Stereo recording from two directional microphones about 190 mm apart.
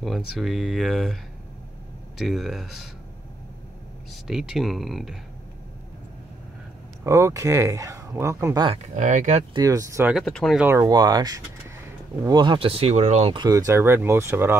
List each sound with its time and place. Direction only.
0.0 s speech: centre (ahead or behind)
2.1 s speech: centre (ahead or behind)
4.1 s speech: centre (ahead or behind)
7.1 s speech: 15° right (ahead or behind)
8.9 s speech: 40° right (ahead or behind)
9.5 s speech: 20° right (ahead or behind)
10.1 s speech: centre (ahead or behind)
10.6 s speech: 15° right (ahead or behind)